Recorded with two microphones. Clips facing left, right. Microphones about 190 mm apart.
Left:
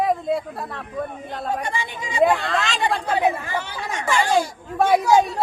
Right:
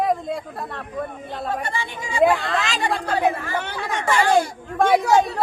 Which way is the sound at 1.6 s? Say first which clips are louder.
Even; 15° left (ahead or behind).